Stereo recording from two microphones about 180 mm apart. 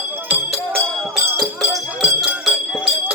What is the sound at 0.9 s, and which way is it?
Music, centre (ahead or behind).